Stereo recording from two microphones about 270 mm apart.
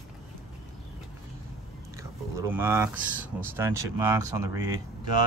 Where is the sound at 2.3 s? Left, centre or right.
Centre.